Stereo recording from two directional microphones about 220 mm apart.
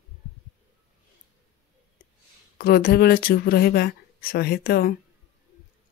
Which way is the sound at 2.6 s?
45° left (ahead or behind).